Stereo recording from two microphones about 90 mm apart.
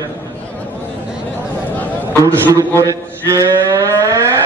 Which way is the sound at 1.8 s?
20° left (ahead or behind).